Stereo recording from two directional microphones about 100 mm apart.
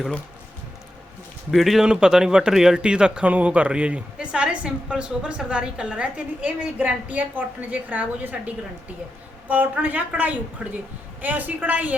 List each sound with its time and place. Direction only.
1.5 s speech: centre (ahead or behind); by 11.9 s 15° right (ahead or behind)